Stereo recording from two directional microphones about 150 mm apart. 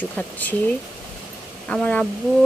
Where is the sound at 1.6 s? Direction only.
10° left (ahead or behind).